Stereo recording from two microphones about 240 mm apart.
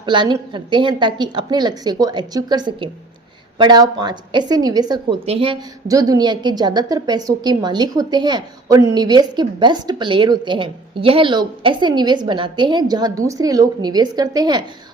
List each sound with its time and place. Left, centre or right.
0.0 s a woman's voice: centre